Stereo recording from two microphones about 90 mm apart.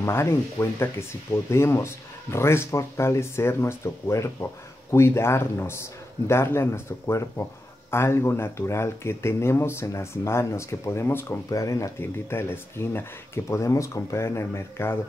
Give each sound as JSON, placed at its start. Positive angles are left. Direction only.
{"t": 0.0, "sound": "speech", "side_deg": 30}
{"t": 11.4, "sound": "speech", "side_deg": 40}